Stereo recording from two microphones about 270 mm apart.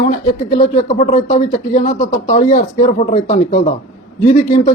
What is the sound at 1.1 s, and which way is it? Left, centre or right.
A man's voice, left.